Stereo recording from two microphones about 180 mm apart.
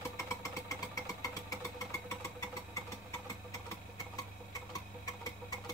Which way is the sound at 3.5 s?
20° left (ahead or behind).